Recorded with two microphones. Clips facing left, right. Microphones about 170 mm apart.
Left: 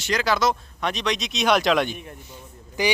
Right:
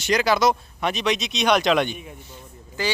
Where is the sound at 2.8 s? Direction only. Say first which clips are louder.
Left 3 dB; 15° left (ahead or behind).